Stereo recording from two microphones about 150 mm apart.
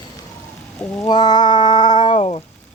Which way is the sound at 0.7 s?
10° left (ahead or behind).